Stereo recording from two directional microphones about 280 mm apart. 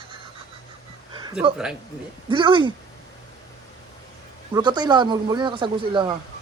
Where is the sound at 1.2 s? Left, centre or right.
Centre.